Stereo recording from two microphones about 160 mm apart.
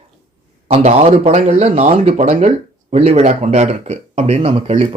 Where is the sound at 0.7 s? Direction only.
40° right (ahead or behind).